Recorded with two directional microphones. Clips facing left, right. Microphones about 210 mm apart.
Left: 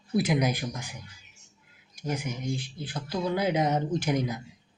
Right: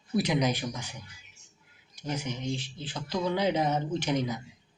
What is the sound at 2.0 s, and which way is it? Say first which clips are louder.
Speech: left 1 dB; 10° left (ahead or behind).